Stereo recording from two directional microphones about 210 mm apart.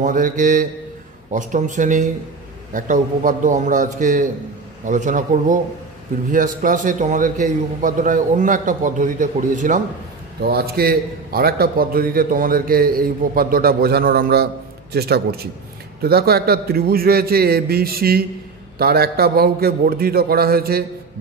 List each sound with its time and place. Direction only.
0.0 s a man's voice: 40° right (ahead or behind)
10.4 s a man's voice: 45° right (ahead or behind)